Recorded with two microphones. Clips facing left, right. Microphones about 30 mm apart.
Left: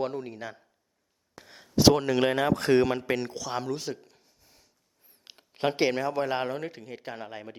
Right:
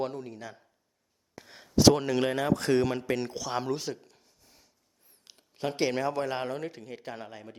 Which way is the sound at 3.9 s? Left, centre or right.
Centre.